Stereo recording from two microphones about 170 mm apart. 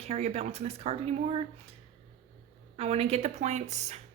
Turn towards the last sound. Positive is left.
turn(degrees=-40)  # may be behind; listen again after turning